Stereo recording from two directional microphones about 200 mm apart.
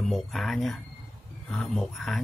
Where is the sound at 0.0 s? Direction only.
Centre (ahead or behind).